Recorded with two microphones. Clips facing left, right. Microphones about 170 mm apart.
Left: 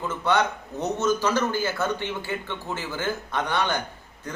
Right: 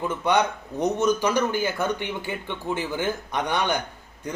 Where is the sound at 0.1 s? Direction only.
15° right (ahead or behind).